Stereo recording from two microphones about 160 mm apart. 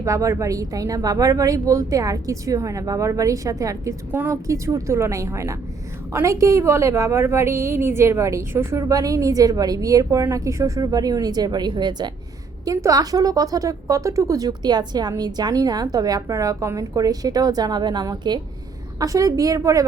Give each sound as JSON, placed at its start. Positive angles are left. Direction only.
{"t": 0.0, "sound": "a woman's voice", "side_deg": -20}